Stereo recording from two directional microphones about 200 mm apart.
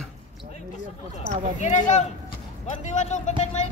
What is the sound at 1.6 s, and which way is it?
A man's voice, 35° left (ahead or behind).